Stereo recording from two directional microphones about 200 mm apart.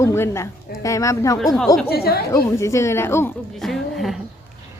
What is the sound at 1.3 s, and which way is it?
Speech, centre (ahead or behind).